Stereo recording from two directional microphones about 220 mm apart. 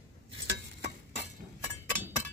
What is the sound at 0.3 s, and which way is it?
Stir, 55° right (ahead or behind).